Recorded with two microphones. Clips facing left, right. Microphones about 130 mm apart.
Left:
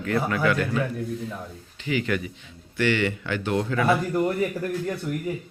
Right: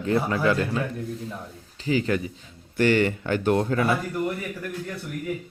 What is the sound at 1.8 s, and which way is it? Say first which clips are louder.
Speech: right 2 dB; 35° right (ahead or behind).